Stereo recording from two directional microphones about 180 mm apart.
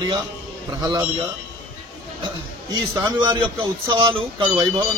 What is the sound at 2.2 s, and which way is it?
A man's voice, 25° right (ahead or behind).